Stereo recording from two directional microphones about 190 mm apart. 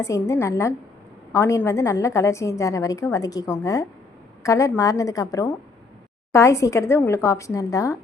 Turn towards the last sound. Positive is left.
turn(degrees=15)  # may be behind; listen again after turning